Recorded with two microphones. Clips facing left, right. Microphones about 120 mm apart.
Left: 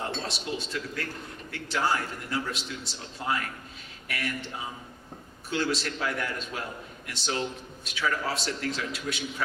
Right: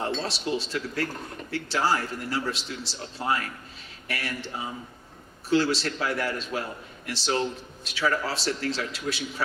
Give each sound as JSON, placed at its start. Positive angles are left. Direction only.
{"t": 0.3, "sound": "a man's voice", "side_deg": -30}
{"t": 5.5, "sound": "a man's voice", "side_deg": -30}